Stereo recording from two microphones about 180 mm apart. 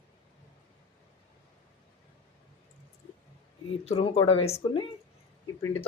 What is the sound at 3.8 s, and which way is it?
Speech, 30° left (ahead or behind).